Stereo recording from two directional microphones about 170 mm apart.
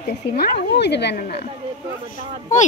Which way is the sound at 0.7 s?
80° left.